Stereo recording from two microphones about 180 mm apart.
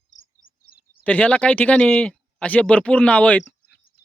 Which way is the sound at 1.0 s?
10° left (ahead or behind).